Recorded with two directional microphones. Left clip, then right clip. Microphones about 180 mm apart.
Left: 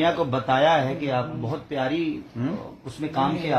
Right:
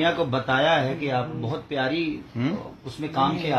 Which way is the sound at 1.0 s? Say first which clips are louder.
Even; 15° right (ahead or behind).